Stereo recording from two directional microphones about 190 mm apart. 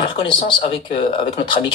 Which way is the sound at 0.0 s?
25° left (ahead or behind).